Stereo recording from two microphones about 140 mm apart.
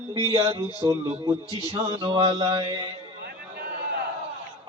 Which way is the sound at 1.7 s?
40° right (ahead or behind).